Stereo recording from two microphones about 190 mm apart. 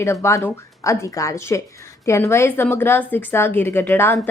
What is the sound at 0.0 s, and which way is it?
A woman's voice, 15° left (ahead or behind).